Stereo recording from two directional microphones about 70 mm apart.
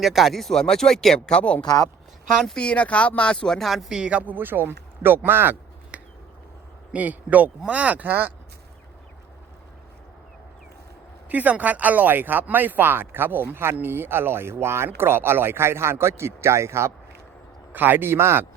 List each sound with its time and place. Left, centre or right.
0.0 s speech: centre
1.6 s speech: left
2.6 s speech: centre
3.9 s speech: centre
4.2 s a man's voice: right
5.9 s finger snapping: centre
6.9 s speech: right
11.3 s a man's voice: right
17.7 s a man's voice: right